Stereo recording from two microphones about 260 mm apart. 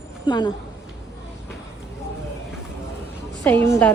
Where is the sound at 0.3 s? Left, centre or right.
Centre.